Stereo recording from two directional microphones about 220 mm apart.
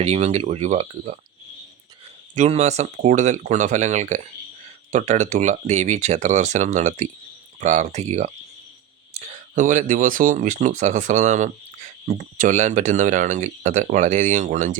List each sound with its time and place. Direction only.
0.0 s speech: 30° right (ahead or behind)
2.3 s speech: 30° right (ahead or behind)